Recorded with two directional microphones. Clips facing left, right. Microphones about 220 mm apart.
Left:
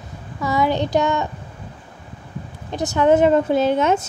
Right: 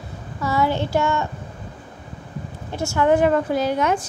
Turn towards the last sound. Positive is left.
turn(degrees=25)  # may be behind; listen again after turning